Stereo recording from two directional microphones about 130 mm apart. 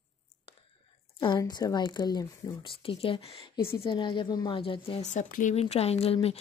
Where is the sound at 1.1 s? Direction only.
35° left (ahead or behind).